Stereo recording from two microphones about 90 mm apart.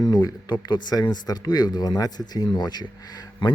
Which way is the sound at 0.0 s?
45° left (ahead or behind).